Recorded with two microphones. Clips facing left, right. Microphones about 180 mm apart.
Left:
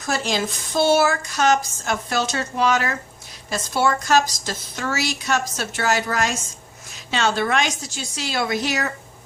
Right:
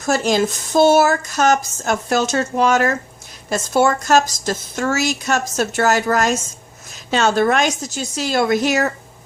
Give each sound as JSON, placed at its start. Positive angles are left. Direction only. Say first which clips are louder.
{"t": 0.0, "sound": "speech", "louder": "right 7 dB", "side_deg": -45}